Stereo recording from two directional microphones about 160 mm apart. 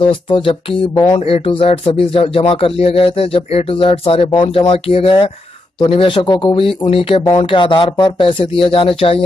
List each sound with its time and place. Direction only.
0.1 s speech: 30° left (ahead or behind)